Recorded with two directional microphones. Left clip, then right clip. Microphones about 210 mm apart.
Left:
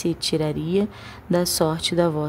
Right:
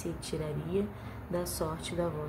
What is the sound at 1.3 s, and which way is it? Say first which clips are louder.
Speech: left 13 dB; 45° left (ahead or behind).